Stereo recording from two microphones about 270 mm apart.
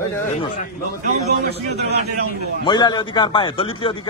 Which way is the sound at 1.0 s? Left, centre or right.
Right.